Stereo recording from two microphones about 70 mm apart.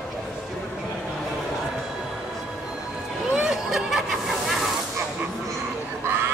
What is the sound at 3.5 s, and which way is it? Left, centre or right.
Snicker, centre.